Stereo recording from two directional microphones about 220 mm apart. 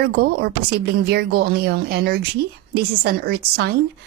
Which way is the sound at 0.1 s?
45° right (ahead or behind).